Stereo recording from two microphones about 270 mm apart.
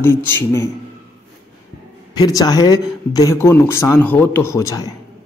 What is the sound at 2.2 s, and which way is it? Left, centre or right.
Speech, centre.